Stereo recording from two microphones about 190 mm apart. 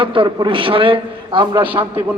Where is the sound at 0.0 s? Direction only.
25° right (ahead or behind).